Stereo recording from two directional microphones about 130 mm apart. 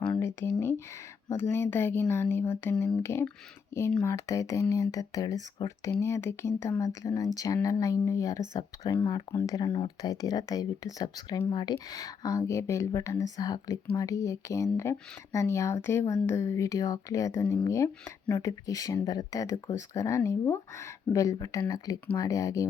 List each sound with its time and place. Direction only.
0.0 s a sound: 15° left (ahead or behind)
1.3 s speech: 20° left (ahead or behind)
9.7 s speech: 35° left (ahead or behind)